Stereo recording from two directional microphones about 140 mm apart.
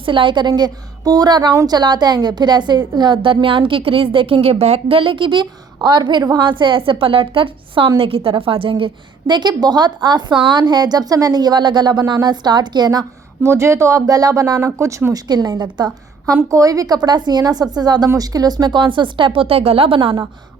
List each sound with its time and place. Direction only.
0.0 s speech: 40° right (ahead or behind)